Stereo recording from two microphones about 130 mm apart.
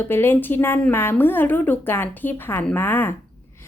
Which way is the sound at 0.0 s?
15° left (ahead or behind).